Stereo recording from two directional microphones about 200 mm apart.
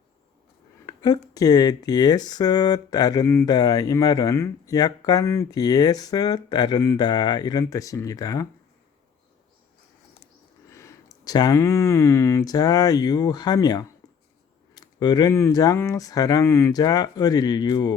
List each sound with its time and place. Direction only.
0.9 s speech: 20° left (ahead or behind)
10.7 s speech: 15° left (ahead or behind)